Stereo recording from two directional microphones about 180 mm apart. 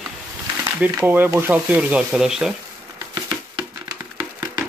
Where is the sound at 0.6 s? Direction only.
10° right (ahead or behind).